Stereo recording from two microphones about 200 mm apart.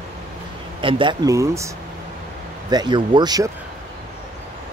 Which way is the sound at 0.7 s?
25° right (ahead or behind).